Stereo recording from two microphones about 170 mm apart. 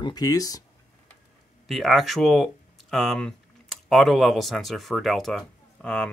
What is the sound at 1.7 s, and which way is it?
Speech, centre (ahead or behind).